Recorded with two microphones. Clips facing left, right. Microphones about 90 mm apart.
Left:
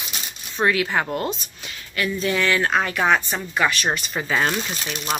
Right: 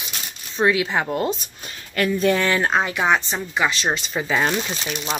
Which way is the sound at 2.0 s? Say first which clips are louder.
Right 4 dB; 45° right (ahead or behind).